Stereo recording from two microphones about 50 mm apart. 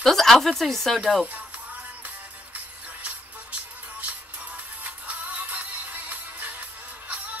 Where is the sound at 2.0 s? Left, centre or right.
Right.